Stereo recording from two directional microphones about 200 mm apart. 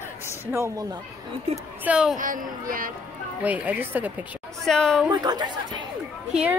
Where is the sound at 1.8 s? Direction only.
5° right (ahead or behind).